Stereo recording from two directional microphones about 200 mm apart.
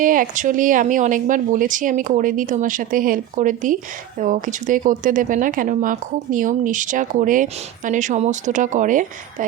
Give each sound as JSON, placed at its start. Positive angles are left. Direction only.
{"t": 0.0, "sound": "a woman's voice", "side_deg": -45}